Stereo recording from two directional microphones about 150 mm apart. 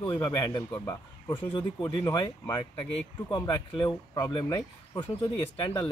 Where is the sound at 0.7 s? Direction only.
15° left (ahead or behind).